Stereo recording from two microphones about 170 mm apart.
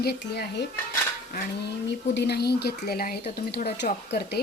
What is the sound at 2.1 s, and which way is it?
Speech, 80° left.